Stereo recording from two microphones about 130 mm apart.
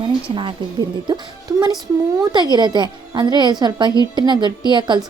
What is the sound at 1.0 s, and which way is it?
A woman's voice, 30° right (ahead or behind).